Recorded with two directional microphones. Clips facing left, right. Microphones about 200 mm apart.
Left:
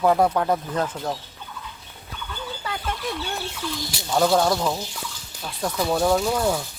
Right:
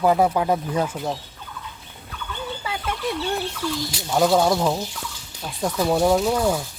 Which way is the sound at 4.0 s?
5° right (ahead or behind).